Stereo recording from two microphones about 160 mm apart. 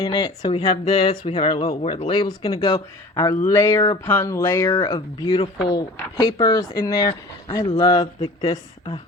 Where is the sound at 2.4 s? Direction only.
25° left (ahead or behind).